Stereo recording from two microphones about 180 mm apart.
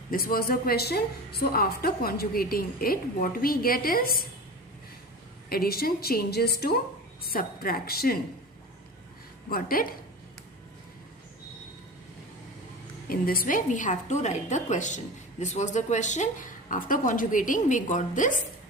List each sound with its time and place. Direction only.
0.1 s a woman's voice: 55° left (ahead or behind)
5.5 s a woman's voice: 55° left (ahead or behind)
9.5 s a woman's voice: 55° left (ahead or behind)
13.1 s a woman's voice: 55° left (ahead or behind)